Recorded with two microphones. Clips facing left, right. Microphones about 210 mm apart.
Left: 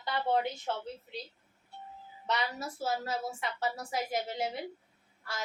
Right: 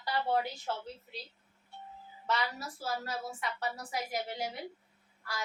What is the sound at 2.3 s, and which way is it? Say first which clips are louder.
A woman's voice: left 1 dB; 20° left (ahead or behind).